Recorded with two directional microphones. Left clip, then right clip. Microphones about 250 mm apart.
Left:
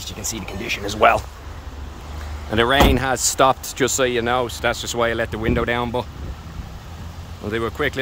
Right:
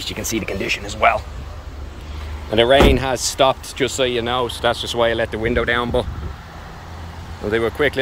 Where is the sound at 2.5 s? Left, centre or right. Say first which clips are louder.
Right 3 dB; centre.